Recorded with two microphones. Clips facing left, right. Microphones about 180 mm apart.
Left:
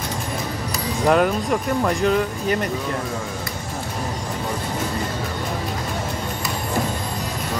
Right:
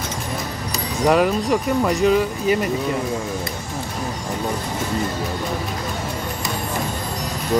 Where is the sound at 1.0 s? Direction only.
Centre (ahead or behind).